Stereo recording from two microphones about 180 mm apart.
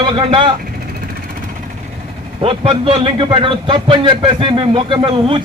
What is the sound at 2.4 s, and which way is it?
A man's voice, 30° right (ahead or behind).